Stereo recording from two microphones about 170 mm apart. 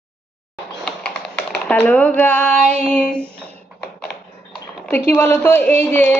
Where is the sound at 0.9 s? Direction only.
5° left (ahead or behind).